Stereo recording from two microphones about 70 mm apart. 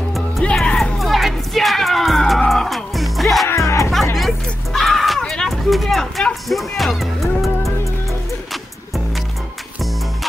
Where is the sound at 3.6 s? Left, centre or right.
Left.